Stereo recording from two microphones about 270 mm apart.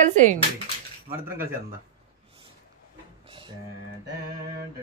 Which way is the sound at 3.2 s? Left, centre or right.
Centre.